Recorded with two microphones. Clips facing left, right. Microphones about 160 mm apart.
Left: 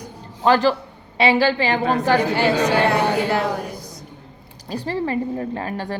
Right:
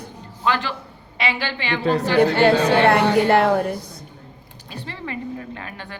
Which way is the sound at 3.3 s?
55° right (ahead or behind).